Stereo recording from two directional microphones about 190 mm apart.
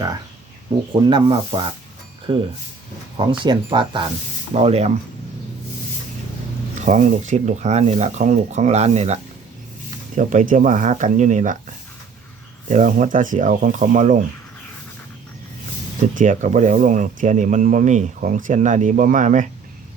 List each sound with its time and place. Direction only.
1.0 s speech: 25° right (ahead or behind)
3.2 s speech: 25° right (ahead or behind)
6.7 s speech: 40° right (ahead or behind)
10.2 s speech: 40° right (ahead or behind)
16.1 s speech: 40° right (ahead or behind)